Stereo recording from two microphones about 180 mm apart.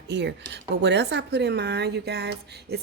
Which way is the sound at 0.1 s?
75° right (ahead or behind).